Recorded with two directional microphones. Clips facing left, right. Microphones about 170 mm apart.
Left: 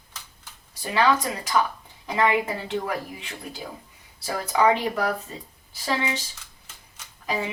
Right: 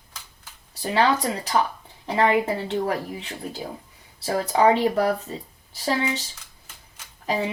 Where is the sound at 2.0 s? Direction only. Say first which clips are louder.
Right 2 dB; 35° right (ahead or behind).